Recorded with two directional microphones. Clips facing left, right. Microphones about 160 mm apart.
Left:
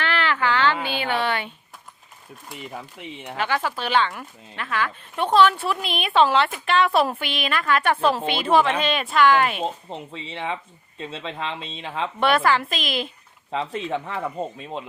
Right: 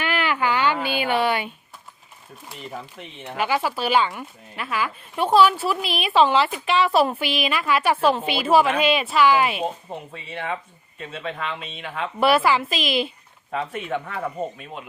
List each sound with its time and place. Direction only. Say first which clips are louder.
0.0 s a sound: even; 10° right (ahead or behind)
3.3 s a woman's voice: right 2 dB; 10° right (ahead or behind)
10.2 s speech: even; 25° left (ahead or behind)
12.2 s a woman's voice: right 2 dB; 5° right (ahead or behind)
13.5 s speech: left 1 dB; 25° left (ahead or behind)